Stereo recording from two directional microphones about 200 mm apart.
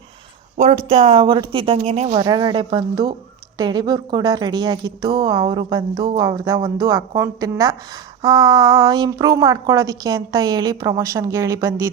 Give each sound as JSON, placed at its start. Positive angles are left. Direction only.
{"t": 0.5, "sound": "a woman's voice", "side_deg": -35}
{"t": 2.2, "sound": "a woman's voice", "side_deg": -20}